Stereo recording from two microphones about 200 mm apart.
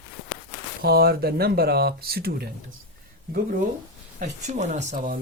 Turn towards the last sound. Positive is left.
turn(degrees=-40)  # may be behind; listen again after turning